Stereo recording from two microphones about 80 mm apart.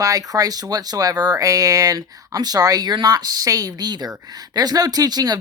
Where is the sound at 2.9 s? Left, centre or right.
Right.